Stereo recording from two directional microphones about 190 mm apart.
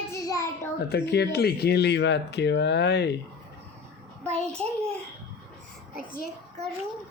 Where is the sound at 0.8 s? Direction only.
60° left (ahead or behind).